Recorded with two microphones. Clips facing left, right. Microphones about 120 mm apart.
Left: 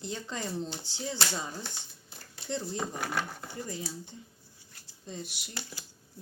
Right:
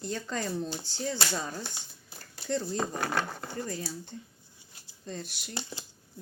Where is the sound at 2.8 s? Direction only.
75° right (ahead or behind).